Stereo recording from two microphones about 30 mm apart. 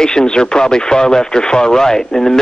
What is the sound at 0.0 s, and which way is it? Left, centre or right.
Speech, left.